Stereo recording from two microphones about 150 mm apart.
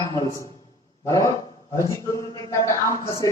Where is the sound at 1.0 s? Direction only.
20° left (ahead or behind).